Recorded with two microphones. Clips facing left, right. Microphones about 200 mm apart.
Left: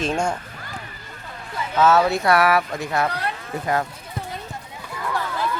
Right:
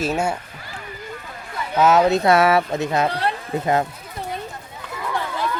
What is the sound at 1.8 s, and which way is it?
Speech, 15° right (ahead or behind).